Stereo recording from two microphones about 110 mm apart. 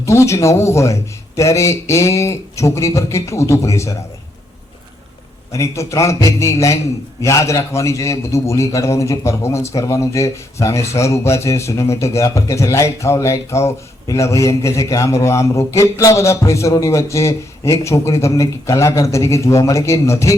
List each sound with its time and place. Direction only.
0.0 s a man's voice: 25° left (ahead or behind)
5.5 s a man's voice: 30° left (ahead or behind)